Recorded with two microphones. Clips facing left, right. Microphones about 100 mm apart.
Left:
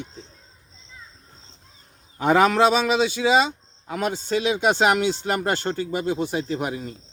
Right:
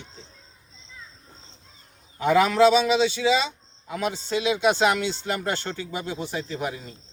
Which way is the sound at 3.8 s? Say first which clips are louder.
Left 2 dB; 55° left (ahead or behind).